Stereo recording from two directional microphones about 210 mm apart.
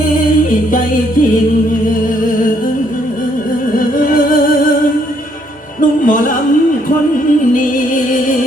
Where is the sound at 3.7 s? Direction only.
40° left (ahead or behind).